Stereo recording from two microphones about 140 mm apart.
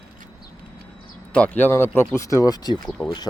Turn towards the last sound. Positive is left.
turn(degrees=0)  # may be behind; listen again after turning